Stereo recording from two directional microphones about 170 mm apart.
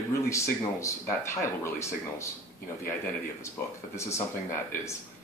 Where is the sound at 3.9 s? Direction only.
15° left (ahead or behind).